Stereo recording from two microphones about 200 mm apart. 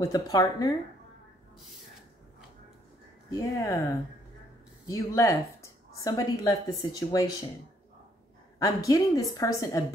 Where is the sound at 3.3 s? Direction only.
15° left (ahead or behind).